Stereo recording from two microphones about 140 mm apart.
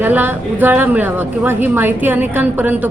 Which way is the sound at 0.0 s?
15° right (ahead or behind).